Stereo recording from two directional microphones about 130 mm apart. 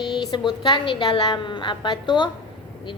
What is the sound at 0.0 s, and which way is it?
A woman's voice, 35° left (ahead or behind).